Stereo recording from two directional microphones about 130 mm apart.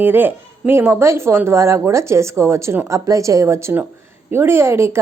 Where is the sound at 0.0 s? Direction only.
15° right (ahead or behind).